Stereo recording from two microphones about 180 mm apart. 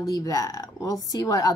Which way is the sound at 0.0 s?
20° left (ahead or behind).